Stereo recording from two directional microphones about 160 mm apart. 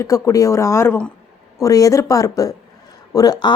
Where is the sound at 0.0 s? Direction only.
20° left (ahead or behind).